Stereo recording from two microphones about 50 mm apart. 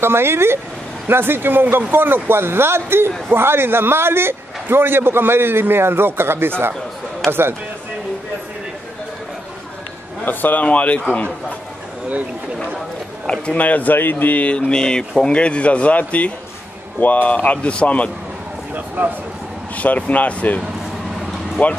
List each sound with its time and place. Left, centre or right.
0.0 s a man's voice: right
10.2 s speech: left
13.3 s speech: left
14.7 s speech: centre
19.0 s a man's voice: right
19.8 s speech: left